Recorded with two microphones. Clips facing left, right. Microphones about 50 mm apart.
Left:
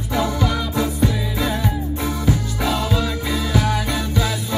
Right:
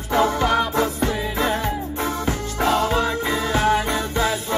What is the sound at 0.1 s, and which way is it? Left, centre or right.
Music, right.